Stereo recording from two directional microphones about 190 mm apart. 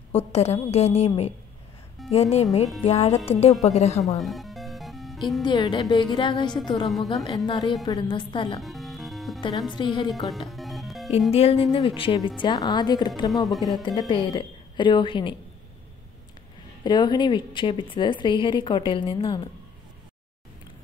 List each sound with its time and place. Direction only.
0.1 s a woman's voice: 35° left (ahead or behind)
4.2 s music: centre (ahead or behind)
5.4 s a woman's voice: 25° left (ahead or behind)
6.9 s a woman's voice: centre (ahead or behind)
7.2 s a woman's voice: 25° left (ahead or behind)
8.5 s music: centre (ahead or behind)
9.4 s a woman's voice: 25° left (ahead or behind)
10.3 s music: centre (ahead or behind)
11.3 s a woman's voice: 30° left (ahead or behind)
16.8 s a woman's voice: 20° left (ahead or behind)